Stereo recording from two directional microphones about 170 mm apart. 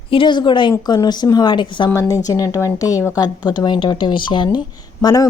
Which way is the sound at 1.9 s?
15° left (ahead or behind).